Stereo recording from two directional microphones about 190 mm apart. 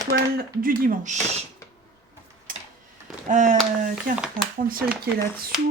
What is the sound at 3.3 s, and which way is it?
Speech, 40° right (ahead or behind).